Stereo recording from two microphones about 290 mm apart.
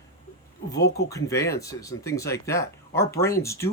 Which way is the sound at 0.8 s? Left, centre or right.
Left.